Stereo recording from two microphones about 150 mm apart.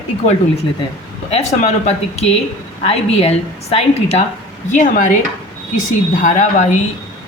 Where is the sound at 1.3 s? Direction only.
50° left (ahead or behind).